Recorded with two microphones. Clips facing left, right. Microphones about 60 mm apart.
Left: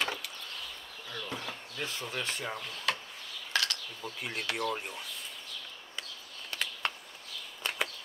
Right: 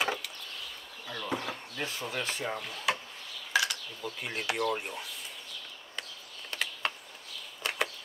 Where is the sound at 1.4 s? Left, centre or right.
Centre.